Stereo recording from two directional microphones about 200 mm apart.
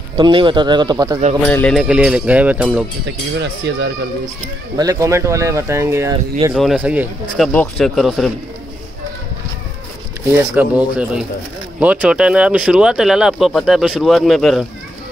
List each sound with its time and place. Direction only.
0.1 s speech: 25° right (ahead or behind)
1.5 s speech: 10° left (ahead or behind)
1.8 s speech: 5° right (ahead or behind)
3.7 s speech: 65° right (ahead or behind)
4.7 s speech: 15° right (ahead or behind)
6.5 s speech: centre (ahead or behind)
10.3 s speech: 10° right (ahead or behind)